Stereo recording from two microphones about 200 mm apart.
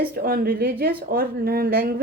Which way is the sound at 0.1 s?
45° right (ahead or behind).